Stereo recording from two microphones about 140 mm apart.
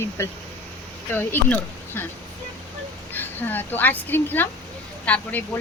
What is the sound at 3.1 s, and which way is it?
A woman's voice, 15° left (ahead or behind).